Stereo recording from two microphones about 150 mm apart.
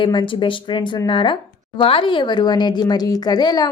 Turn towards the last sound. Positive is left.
turn(degrees=30)  # may be behind; listen again after turning